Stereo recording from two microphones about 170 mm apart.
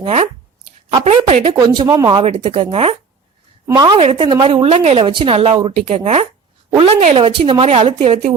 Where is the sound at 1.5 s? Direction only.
25° right (ahead or behind).